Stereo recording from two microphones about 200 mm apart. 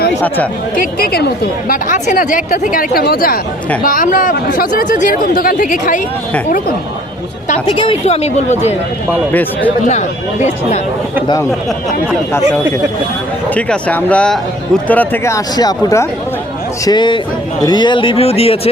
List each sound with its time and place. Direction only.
0.8 s speech: 50° left (ahead or behind)
7.7 s a woman's voice: 25° left (ahead or behind)
9.3 s speech: 10° left (ahead or behind)
13.5 s a man's voice: 5° left (ahead or behind); by 18.7 s 30° left (ahead or behind)